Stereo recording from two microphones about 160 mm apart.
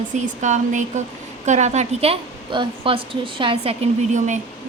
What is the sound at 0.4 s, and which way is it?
Speech, 50° right (ahead or behind).